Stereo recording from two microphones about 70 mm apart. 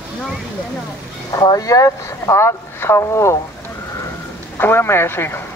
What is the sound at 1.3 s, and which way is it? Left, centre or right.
Speech, left.